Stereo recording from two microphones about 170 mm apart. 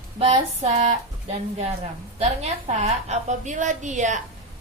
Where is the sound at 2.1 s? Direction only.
40° right (ahead or behind).